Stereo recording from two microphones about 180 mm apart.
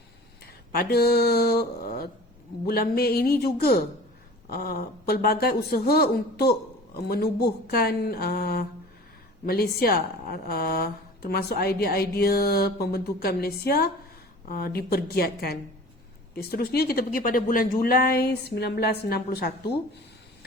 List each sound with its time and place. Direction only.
0.7 s a woman's voice: 60° left (ahead or behind)